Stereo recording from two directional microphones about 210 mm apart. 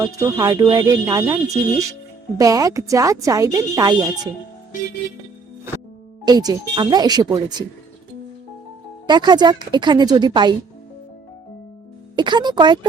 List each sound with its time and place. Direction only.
0.0 s speech: 15° right (ahead or behind)
2.4 s speech: 15° right (ahead or behind)
5.7 s music: 10° right (ahead or behind)
6.2 s speech: 20° right (ahead or behind)
9.0 s speech: 20° right (ahead or behind)
12.1 s speech: 20° right (ahead or behind)